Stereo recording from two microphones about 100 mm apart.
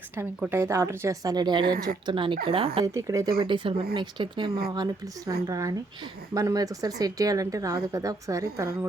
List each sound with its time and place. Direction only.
0.5 s speech: 30° right (ahead or behind); by 2.8 s 65° right (ahead or behind)
2.8 s speech: 30° right (ahead or behind)
3.3 s speech: 60° right (ahead or behind); by 8.9 s 30° right (ahead or behind)